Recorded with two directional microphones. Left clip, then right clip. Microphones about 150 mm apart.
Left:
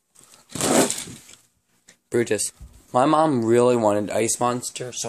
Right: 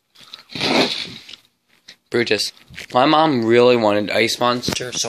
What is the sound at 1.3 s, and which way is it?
Mechanisms, 40° left (ahead or behind).